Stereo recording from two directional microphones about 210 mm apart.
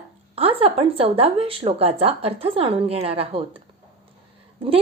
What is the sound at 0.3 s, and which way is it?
A woman's voice, 25° right (ahead or behind).